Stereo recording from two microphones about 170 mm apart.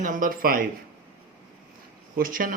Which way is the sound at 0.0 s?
50° right (ahead or behind).